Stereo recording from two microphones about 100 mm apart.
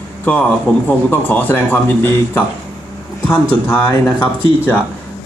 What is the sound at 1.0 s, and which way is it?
Speech, 20° left (ahead or behind).